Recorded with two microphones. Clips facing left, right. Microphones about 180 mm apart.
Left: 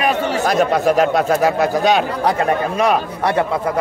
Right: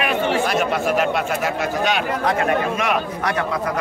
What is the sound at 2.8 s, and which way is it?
Speech, 30° left (ahead or behind).